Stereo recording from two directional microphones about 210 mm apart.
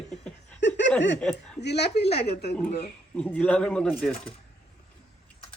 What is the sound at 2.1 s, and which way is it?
Speech, 30° left (ahead or behind).